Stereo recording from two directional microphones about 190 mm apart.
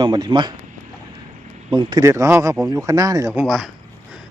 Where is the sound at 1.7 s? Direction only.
25° right (ahead or behind).